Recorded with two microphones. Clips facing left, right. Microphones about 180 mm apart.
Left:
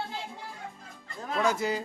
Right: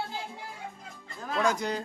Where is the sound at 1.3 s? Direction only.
Centre (ahead or behind).